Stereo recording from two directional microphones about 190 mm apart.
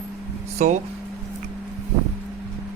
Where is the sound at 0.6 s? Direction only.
35° right (ahead or behind).